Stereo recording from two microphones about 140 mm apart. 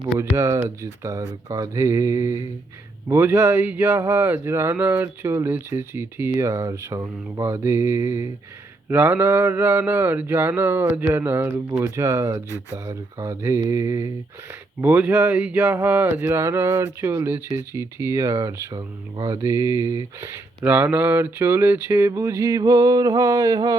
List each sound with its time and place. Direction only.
0.3 s speech: 20° right (ahead or behind)